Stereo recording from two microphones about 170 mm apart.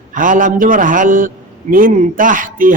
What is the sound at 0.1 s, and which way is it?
A man's voice, 50° right (ahead or behind).